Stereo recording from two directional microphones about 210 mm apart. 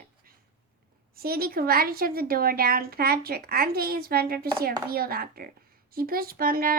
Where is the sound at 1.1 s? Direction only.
45° right (ahead or behind).